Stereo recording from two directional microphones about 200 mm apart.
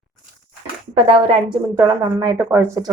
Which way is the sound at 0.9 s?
25° right (ahead or behind).